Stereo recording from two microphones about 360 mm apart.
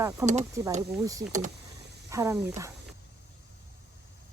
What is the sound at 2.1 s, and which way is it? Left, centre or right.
Speech, centre.